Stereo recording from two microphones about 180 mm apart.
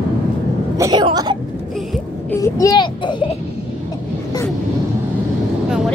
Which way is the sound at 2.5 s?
20° left (ahead or behind).